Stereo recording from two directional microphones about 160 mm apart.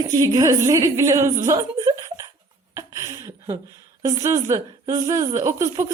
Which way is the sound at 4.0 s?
20° right (ahead or behind).